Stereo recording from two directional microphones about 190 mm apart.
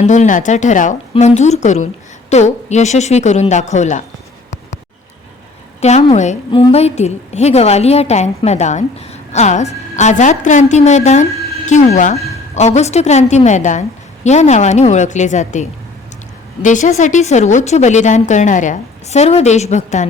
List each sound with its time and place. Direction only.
0.0 s a woman's voice: 40° left (ahead or behind)
5.8 s a woman's voice: 35° left (ahead or behind)
16.6 s a woman's voice: 40° left (ahead or behind)